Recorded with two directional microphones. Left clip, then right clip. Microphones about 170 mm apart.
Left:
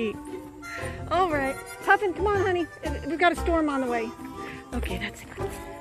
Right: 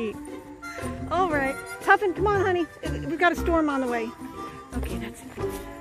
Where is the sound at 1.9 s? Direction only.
35° right (ahead or behind).